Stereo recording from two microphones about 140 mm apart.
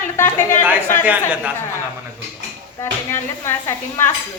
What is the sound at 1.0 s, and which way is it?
Speech, 10° right (ahead or behind).